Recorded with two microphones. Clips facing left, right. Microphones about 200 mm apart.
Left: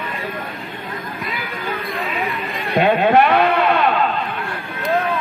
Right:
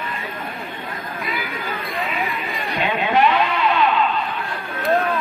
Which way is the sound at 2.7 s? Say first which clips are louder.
Left 7 dB; 55° left (ahead or behind).